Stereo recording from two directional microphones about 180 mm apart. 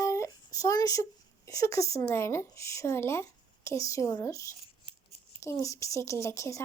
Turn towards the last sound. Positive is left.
turn(degrees=15)  # may be behind; listen again after turning